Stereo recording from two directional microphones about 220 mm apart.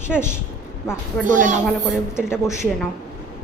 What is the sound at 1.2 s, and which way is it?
Speech, 35° right (ahead or behind).